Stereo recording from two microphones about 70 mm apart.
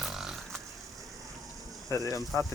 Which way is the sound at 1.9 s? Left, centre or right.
Left.